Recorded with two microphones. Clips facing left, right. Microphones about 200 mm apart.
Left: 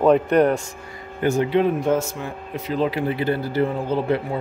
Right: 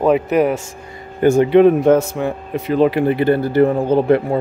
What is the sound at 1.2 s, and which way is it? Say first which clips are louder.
Speech: right 8 dB; 50° right (ahead or behind).